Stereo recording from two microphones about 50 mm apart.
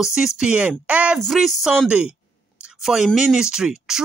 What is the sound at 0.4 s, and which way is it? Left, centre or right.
Speech, right.